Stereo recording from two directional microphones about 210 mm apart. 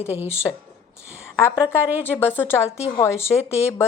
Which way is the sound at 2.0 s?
10° left (ahead or behind).